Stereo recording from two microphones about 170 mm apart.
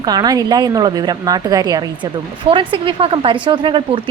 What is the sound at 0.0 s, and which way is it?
A woman's voice, 25° right (ahead or behind).